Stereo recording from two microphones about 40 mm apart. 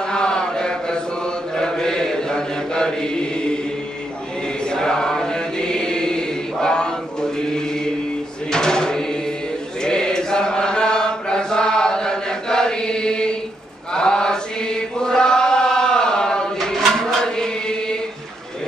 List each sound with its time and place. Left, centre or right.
0.0 s chant: centre
4.6 s choir: centre
8.5 s drawer open or close: centre
9.8 s chant: centre